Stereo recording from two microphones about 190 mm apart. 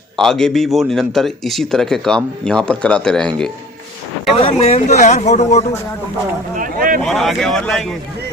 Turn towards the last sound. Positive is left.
turn(degrees=0)  # may be behind; listen again after turning